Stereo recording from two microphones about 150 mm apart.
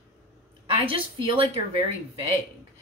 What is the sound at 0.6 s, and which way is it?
Speech, 40° right (ahead or behind).